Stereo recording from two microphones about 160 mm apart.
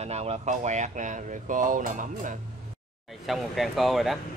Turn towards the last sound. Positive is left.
turn(degrees=0)  # may be behind; listen again after turning